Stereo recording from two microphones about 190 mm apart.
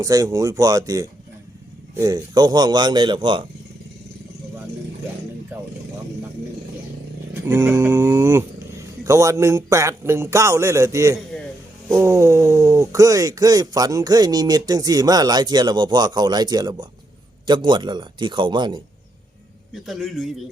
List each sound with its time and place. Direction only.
0.0 s a man's voice: 20° right (ahead or behind)
7.4 s a man's voice: 15° right (ahead or behind)
19.7 s a man's voice: centre (ahead or behind)